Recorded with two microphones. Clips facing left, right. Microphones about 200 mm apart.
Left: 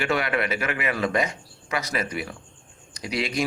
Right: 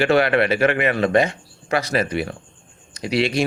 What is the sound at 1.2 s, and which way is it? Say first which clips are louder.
Speech: right 6 dB; 30° right (ahead or behind).